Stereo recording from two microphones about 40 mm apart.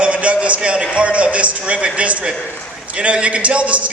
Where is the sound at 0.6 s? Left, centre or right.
Right.